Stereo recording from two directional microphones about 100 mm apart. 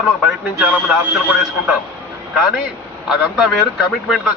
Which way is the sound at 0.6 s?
10° right (ahead or behind).